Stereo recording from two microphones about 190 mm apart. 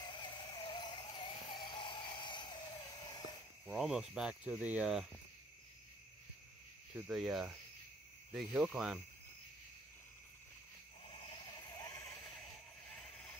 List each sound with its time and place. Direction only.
0.0 s music: 25° left (ahead or behind)
3.6 s cricket: centre (ahead or behind)
4.1 s speech: 5° right (ahead or behind)
7.1 s speech: centre (ahead or behind)
11.1 s a sound: 25° left (ahead or behind)
12.9 s a sound: 5° left (ahead or behind)